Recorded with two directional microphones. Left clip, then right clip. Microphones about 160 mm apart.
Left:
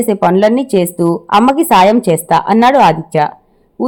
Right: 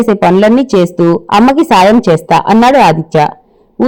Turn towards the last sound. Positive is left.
turn(degrees=-40)  # may be behind; listen again after turning